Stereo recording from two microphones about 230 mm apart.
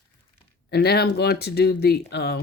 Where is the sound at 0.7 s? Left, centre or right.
Left.